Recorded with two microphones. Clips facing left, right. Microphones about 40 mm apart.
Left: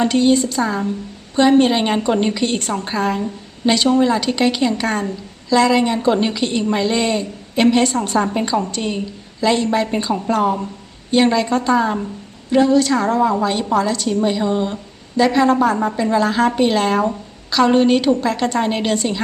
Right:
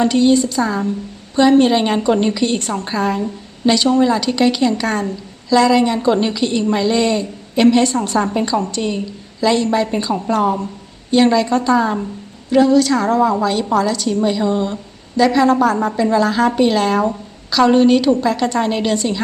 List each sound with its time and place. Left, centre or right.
0.0 s a woman's voice: left
0.6 s a woman's voice: centre
1.4 s a woman's voice: centre
3.7 s a woman's voice: centre
12.5 s a woman's voice: centre
14.1 s a woman's voice: centre